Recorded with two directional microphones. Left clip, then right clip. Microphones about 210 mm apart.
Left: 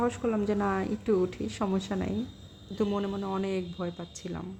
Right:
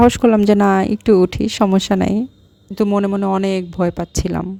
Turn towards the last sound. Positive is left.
turn(degrees=-50)  # may be behind; listen again after turning